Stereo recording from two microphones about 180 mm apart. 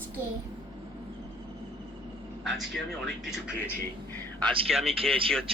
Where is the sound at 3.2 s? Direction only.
5° right (ahead or behind).